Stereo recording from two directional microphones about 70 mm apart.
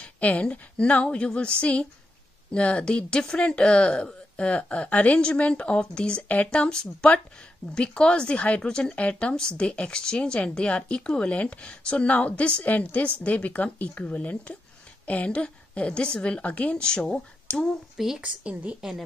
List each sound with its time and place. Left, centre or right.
0.0 s speech: centre
17.9 s a woman's voice: centre
18.2 s a woman's voice: centre
18.8 s a woman's voice: centre